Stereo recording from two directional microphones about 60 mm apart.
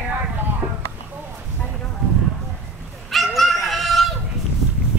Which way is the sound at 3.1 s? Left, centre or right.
Centre.